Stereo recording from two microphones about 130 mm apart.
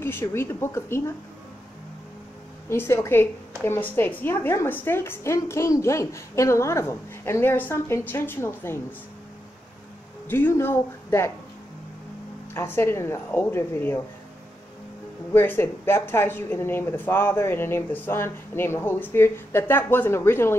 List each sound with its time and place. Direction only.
0.0 s a woman's voice: 20° left (ahead or behind)
2.7 s a woman's voice: 20° left (ahead or behind)
10.2 s speech: 15° left (ahead or behind)
12.5 s a woman's voice: 20° left (ahead or behind)
15.3 s speech: 15° left (ahead or behind)